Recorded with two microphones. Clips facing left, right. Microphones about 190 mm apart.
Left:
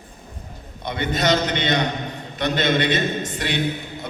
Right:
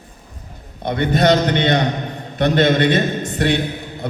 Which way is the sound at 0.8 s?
55° right (ahead or behind).